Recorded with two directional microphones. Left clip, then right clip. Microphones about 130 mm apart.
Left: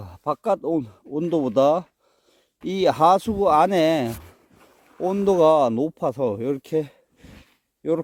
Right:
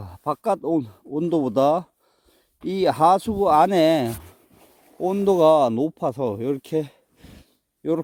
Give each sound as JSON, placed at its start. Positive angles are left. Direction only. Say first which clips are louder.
{"t": 0.0, "sound": "speech", "louder": "even", "side_deg": -35}
{"t": 2.6, "sound": "speech", "louder": "even", "side_deg": -15}